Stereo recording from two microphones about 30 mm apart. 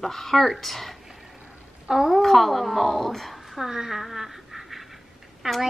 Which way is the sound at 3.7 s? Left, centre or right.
Centre.